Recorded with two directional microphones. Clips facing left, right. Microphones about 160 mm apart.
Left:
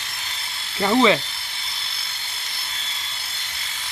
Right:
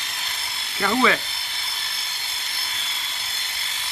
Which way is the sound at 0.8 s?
20° left (ahead or behind).